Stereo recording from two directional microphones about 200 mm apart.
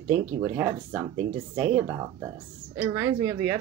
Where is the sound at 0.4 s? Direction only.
15° right (ahead or behind).